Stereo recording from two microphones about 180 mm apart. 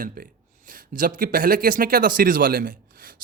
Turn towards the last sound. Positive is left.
turn(degrees=-55)  # may be behind; listen again after turning